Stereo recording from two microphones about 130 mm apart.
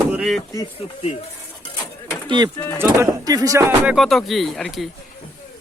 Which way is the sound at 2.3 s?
35° right (ahead or behind).